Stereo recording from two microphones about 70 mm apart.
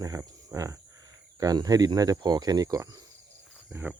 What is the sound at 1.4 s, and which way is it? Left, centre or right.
Speech, right.